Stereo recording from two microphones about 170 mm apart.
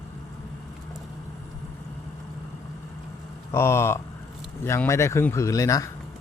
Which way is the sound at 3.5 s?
15° left (ahead or behind).